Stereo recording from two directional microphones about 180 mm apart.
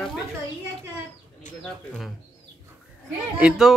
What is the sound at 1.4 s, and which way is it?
Bird, 45° left (ahead or behind).